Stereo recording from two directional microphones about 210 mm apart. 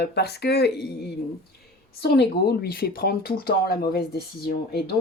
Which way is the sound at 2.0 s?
50° left (ahead or behind).